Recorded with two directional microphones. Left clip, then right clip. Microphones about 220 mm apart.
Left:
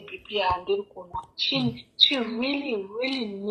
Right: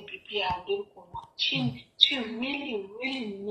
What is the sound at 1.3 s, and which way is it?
Speech, 45° left (ahead or behind).